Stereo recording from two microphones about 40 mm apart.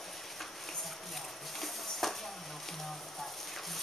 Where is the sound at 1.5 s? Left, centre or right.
Centre.